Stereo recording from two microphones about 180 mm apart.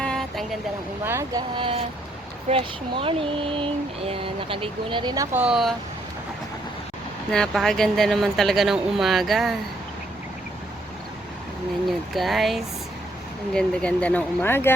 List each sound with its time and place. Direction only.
0.0 s vehicle: 5° left (ahead or behind)
1.0 s speech: 15° right (ahead or behind)
1.5 s speech: 30° right (ahead or behind); by 5.7 s 5° right (ahead or behind)
7.3 s speech: 5° left (ahead or behind)
12.1 s speech: centre (ahead or behind)